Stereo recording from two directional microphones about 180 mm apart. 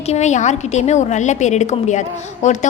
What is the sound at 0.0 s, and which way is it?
A woman's voice, 40° left (ahead or behind).